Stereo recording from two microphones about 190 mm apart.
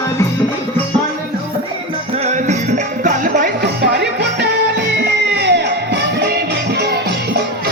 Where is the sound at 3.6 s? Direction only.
60° right (ahead or behind).